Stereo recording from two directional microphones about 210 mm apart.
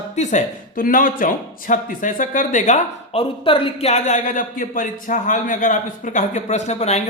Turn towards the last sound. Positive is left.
turn(degrees=30)  # may be behind; listen again after turning